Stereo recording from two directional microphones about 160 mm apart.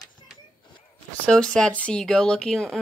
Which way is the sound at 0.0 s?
25° left (ahead or behind).